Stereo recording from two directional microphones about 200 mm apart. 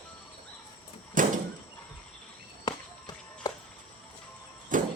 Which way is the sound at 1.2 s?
40° right (ahead or behind).